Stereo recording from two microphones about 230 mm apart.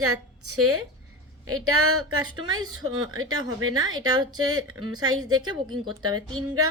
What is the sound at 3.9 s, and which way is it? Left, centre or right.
Speech, centre.